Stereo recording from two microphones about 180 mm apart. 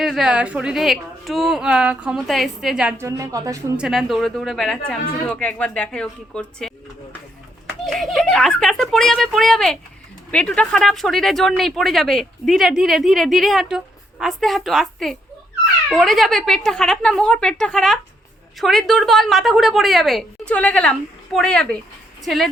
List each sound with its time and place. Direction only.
0.0 s speech: centre (ahead or behind)
3.0 s a woman's voice: 15° right (ahead or behind)
3.8 s speech: centre (ahead or behind)